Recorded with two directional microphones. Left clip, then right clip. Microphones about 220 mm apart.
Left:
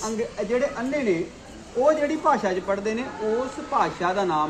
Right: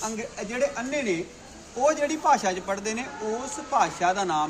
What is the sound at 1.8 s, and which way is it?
A woman's voice, 35° right (ahead or behind).